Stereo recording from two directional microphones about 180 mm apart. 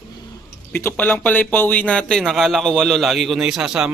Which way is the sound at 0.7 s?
10° left (ahead or behind).